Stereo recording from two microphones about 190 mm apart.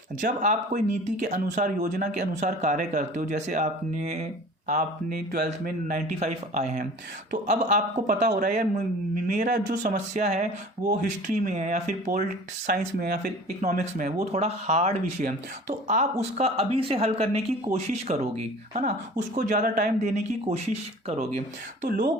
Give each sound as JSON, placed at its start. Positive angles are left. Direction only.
{"t": 0.2, "sound": "speech", "side_deg": -40}
{"t": 13.6, "sound": "speech", "side_deg": -40}
{"t": 16.4, "sound": "speech", "side_deg": -30}
{"t": 21.8, "sound": "speech", "side_deg": -45}